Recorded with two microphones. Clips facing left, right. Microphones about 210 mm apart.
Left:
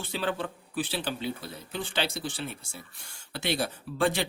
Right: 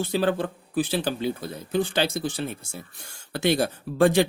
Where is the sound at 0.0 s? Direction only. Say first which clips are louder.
Right 8 dB; 40° right (ahead or behind).